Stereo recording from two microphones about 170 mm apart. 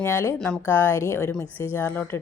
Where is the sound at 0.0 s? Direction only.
15° left (ahead or behind).